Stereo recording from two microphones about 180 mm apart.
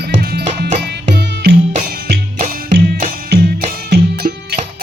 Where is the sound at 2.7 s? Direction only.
55° right (ahead or behind).